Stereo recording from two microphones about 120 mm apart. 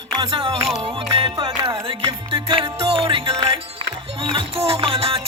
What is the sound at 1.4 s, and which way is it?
Music, 35° right (ahead or behind).